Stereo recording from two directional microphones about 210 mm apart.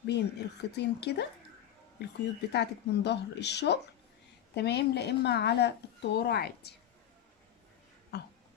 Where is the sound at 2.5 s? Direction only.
55° left (ahead or behind).